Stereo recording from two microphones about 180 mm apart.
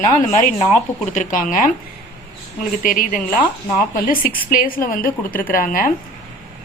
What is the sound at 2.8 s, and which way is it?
A man's voice, 50° left (ahead or behind).